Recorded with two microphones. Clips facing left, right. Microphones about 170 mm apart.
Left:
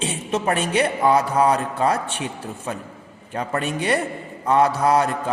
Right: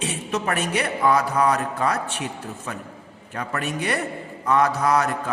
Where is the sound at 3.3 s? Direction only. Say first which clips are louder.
Left 3 dB; 30° left (ahead or behind).